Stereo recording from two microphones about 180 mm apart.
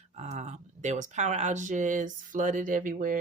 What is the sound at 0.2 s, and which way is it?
Speech, 40° right (ahead or behind).